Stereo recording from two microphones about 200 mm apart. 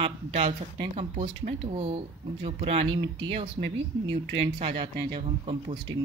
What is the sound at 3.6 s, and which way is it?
Speech, 70° right (ahead or behind).